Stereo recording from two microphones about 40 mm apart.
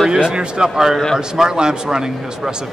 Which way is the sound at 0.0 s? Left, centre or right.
Centre.